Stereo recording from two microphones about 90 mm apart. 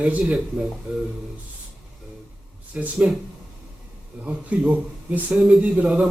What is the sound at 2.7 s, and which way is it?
Speech, 15° right (ahead or behind).